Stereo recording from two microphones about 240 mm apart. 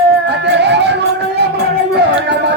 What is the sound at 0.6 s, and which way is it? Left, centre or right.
Music, right.